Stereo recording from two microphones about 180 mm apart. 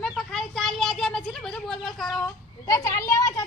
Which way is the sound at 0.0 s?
Centre (ahead or behind).